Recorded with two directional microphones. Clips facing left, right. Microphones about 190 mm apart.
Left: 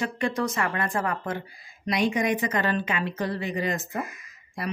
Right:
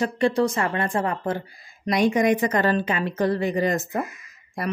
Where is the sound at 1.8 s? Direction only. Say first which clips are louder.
Right 5 dB; 45° right (ahead or behind).